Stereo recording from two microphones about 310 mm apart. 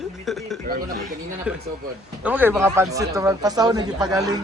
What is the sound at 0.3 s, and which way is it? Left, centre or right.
Speech, centre.